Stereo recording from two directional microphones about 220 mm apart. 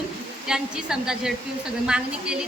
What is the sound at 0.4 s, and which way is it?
A woman's voice, 5° right (ahead or behind).